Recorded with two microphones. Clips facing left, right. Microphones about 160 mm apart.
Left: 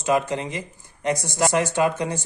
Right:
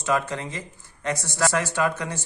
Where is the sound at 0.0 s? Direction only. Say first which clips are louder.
Left 3 dB; 15° left (ahead or behind).